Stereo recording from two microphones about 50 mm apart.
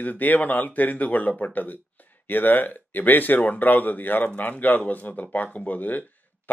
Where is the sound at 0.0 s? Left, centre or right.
Left.